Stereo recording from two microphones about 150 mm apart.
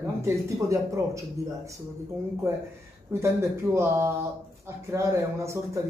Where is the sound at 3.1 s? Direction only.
15° right (ahead or behind).